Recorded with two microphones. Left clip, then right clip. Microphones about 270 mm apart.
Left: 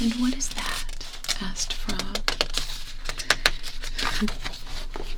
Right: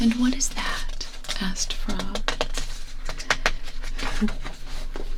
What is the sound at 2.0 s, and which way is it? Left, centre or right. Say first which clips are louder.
Music: left 1 dB; left.